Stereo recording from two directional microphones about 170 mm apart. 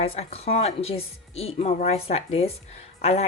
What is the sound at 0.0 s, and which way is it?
Speech, 35° left (ahead or behind).